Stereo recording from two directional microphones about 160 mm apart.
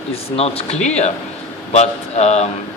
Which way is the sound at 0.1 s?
40° left (ahead or behind).